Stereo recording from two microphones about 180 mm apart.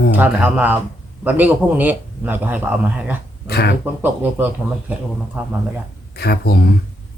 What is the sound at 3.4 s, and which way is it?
Speech, 65° left (ahead or behind).